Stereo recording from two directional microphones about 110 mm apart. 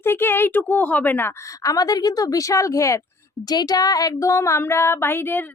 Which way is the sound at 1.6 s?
35° left (ahead or behind).